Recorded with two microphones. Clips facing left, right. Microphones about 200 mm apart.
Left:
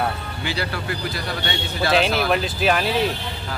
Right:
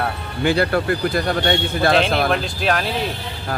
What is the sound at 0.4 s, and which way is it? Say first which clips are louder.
A man's voice: right 10 dB; 55° right (ahead or behind).